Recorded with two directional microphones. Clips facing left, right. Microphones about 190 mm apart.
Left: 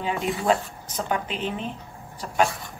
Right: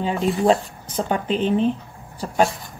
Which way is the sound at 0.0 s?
30° right (ahead or behind).